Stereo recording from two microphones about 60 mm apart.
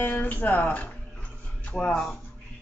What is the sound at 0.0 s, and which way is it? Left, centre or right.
Speech, left.